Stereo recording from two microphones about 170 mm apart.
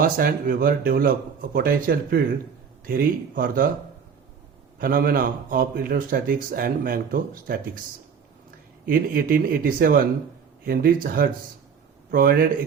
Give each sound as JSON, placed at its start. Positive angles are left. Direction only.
{"t": 0.0, "sound": "speech", "side_deg": -55}
{"t": 4.8, "sound": "speech", "side_deg": -60}
{"t": 8.9, "sound": "speech", "side_deg": -55}